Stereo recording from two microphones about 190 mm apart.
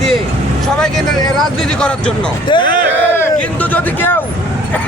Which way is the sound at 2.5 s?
25° left (ahead or behind).